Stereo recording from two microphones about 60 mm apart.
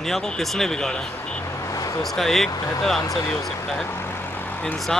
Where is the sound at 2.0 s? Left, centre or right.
Centre.